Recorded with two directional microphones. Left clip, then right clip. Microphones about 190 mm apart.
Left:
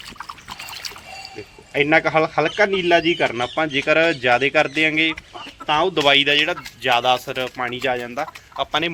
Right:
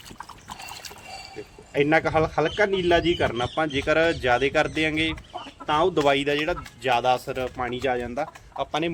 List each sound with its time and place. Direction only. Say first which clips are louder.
1.7 s a man's voice: left 4 dB; 20° left (ahead or behind)
5.6 s speech: left 4 dB; 5° left (ahead or behind)